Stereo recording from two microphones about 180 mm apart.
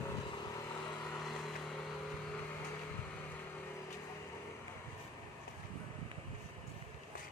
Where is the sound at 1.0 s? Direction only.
Centre (ahead or behind).